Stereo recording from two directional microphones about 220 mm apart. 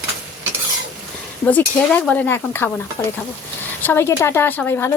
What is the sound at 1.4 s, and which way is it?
Speech, 5° left (ahead or behind).